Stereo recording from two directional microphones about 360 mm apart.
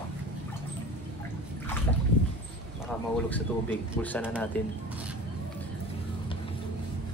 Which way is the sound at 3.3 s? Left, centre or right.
Centre.